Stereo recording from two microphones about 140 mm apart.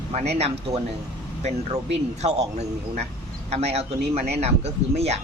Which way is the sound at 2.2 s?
50° right (ahead or behind).